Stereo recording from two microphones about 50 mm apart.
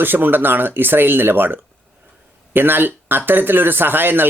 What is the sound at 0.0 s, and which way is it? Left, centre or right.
Speech, right.